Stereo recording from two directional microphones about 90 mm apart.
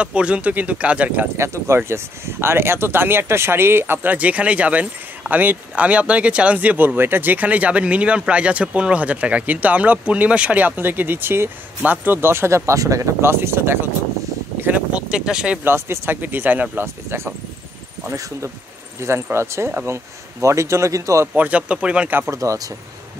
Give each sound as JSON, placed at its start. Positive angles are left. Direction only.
{"t": 0.0, "sound": "speech", "side_deg": -15}
{"t": 1.3, "sound": "speech", "side_deg": -30}
{"t": 14.6, "sound": "speech", "side_deg": -15}
{"t": 15.6, "sound": "speech", "side_deg": -25}
{"t": 16.8, "sound": "speech", "side_deg": -30}
{"t": 18.9, "sound": "speech", "side_deg": -30}
{"t": 21.4, "sound": "speech", "side_deg": -15}
{"t": 22.3, "sound": "speech", "side_deg": -35}